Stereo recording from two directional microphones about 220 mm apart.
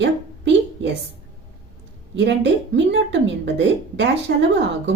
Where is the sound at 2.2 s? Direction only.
55° right (ahead or behind).